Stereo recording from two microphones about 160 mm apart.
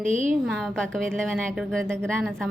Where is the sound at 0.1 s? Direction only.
50° right (ahead or behind).